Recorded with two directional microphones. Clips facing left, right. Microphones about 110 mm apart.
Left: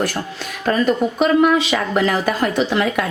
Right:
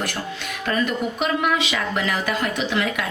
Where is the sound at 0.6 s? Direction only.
35° left (ahead or behind).